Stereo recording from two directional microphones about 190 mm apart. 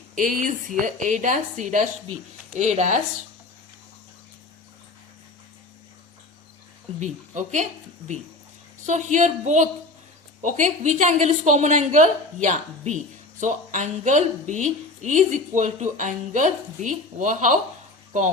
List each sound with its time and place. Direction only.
0.2 s a woman's voice: 45° right (ahead or behind)
7.0 s a woman's voice: 40° right (ahead or behind)